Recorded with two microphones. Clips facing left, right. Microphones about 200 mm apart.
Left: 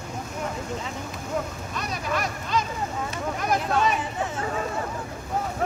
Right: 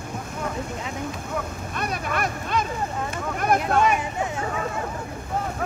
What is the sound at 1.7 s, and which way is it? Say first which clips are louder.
Boat: right 2 dB; 55° right (ahead or behind).